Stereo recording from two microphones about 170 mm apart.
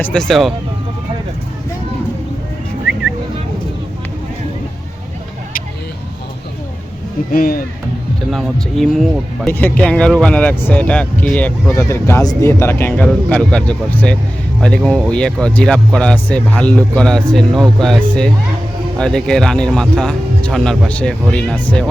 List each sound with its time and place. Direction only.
0.0 s speech: 5° left (ahead or behind)
7.3 s speech: 60° left (ahead or behind)
8.3 s speech: centre (ahead or behind)
9.5 s speech: 10° left (ahead or behind)